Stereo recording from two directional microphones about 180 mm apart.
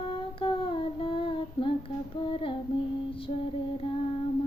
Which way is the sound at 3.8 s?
25° left (ahead or behind).